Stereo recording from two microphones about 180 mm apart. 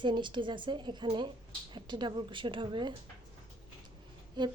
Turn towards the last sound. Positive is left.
turn(degrees=-25)  # may be behind; listen again after turning